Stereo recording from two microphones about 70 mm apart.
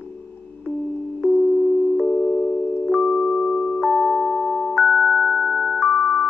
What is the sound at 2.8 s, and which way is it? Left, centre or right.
Music, centre.